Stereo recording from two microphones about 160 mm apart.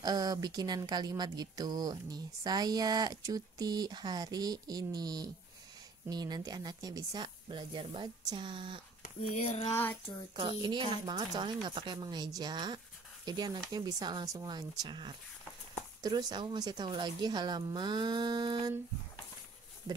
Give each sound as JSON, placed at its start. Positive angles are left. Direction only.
{"t": 0.0, "sound": "speech", "side_deg": -25}
{"t": 9.0, "sound": "a sound", "side_deg": 50}
{"t": 10.3, "sound": "speech", "side_deg": -30}